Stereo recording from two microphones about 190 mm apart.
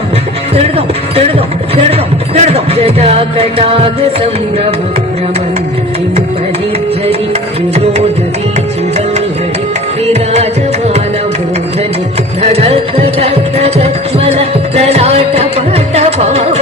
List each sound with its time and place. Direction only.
1.7 s speech: 30° right (ahead or behind)
12.4 s music: 30° right (ahead or behind)